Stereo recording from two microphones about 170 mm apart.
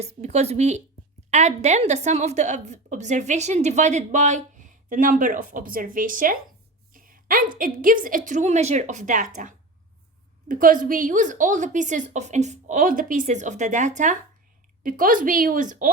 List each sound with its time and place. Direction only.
0.0 s a woman's voice: 40° right (ahead or behind)
6.9 s a sound: 55° right (ahead or behind)
7.6 s a woman's voice: 55° right (ahead or behind)